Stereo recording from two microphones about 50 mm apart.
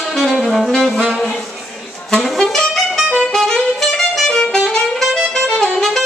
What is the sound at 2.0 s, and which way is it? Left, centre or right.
Saxophone, centre.